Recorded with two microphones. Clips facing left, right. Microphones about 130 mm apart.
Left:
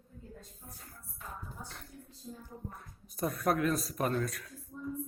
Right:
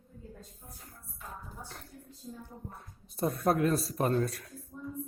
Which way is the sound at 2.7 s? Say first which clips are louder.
Even; 25° right (ahead or behind).